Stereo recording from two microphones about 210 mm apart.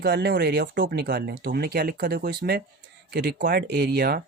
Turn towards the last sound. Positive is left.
turn(degrees=-50)  # may be behind; listen again after turning